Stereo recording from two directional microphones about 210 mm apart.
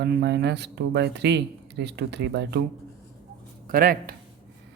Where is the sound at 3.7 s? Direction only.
45° right (ahead or behind).